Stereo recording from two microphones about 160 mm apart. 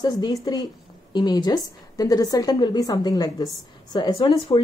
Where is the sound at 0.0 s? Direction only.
25° left (ahead or behind).